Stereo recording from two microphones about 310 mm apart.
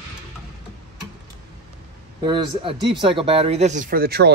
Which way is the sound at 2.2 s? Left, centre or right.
Centre.